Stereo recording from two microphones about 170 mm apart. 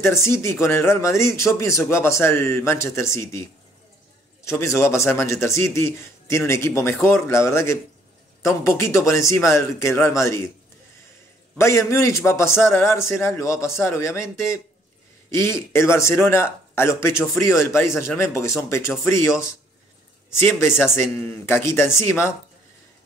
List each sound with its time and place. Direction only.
0.0 s speech: 15° left (ahead or behind)
4.5 s speech: 15° left (ahead or behind)
11.5 s speech: 15° left (ahead or behind)
20.3 s speech: 15° left (ahead or behind)